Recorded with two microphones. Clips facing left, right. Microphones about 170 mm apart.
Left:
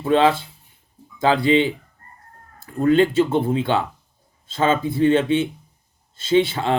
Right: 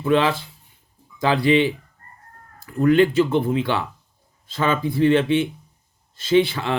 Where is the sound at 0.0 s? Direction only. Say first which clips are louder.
Left 2 dB; 25° left (ahead or behind).